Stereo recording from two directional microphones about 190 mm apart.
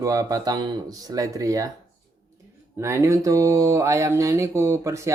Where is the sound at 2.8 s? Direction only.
15° right (ahead or behind).